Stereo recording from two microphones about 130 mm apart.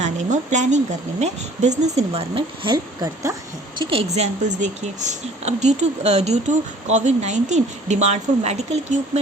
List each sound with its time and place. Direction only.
0.0 s speech: 65° right (ahead or behind); by 2.7 s 45° right (ahead or behind)
2.7 s speech: 30° right (ahead or behind)
3.8 s a woman's voice: 45° right (ahead or behind)
4.1 s speech: 65° right (ahead or behind)